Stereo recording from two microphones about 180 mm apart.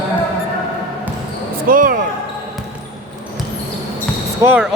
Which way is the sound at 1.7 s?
50° right (ahead or behind).